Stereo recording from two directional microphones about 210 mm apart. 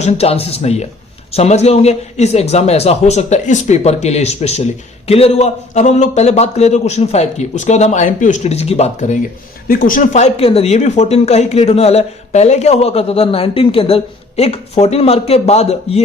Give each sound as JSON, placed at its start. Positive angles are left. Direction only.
{"t": 0.0, "sound": "a man's voice", "side_deg": 30}